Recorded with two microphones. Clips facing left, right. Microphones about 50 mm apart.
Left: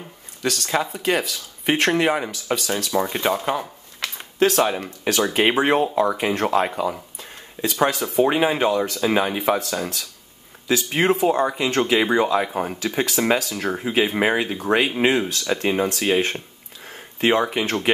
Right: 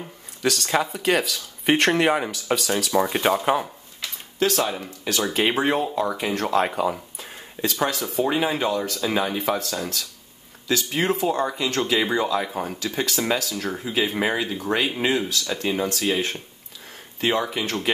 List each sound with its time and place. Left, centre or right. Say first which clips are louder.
0.4 s speech: even; centre
4.4 s speech: left 4 dB; left
4.7 s speech: left 4 dB; left
5.2 s speech: left 3 dB; centre
6.5 s speech: left 1 dB; centre
7.6 s speech: left 3 dB; centre
10.9 s speech: left 5 dB; left